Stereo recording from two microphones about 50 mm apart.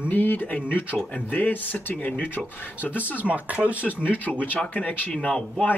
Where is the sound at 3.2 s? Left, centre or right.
Right.